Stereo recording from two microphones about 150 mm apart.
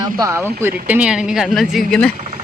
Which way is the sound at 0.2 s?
20° right (ahead or behind).